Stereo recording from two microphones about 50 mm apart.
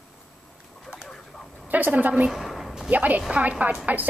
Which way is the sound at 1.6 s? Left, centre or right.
Right.